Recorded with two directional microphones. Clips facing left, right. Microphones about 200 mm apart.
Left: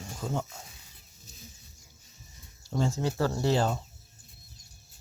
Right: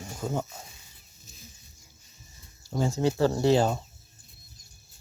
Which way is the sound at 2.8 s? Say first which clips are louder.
Right 4 dB; 15° right (ahead or behind).